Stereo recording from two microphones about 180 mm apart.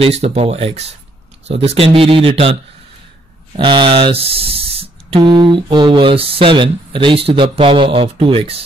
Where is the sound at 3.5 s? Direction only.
25° right (ahead or behind).